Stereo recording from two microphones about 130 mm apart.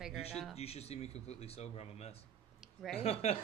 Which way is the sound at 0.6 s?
55° left (ahead or behind).